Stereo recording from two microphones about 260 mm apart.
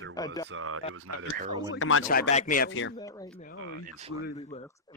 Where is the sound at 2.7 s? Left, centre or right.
Left.